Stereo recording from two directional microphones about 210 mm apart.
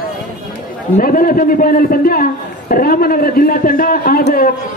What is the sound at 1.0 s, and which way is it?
A man's voice, 40° left (ahead or behind).